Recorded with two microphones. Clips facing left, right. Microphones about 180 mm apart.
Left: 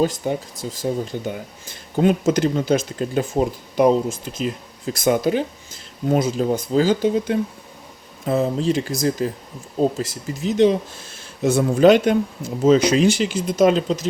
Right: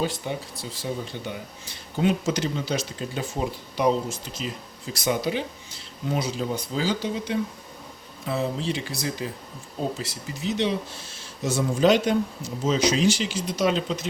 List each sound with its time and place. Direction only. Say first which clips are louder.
0.0 s speech: left 7 dB; 45° left (ahead or behind)
11.4 s speech: left 7 dB; 55° left (ahead or behind)